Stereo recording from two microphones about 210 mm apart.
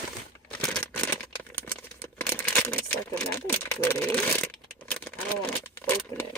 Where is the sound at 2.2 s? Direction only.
5° left (ahead or behind).